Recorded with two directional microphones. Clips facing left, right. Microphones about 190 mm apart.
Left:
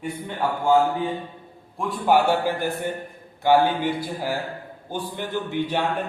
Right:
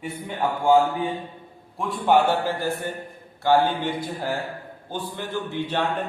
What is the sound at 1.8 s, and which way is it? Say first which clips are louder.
A man's voice: even; centre (ahead or behind).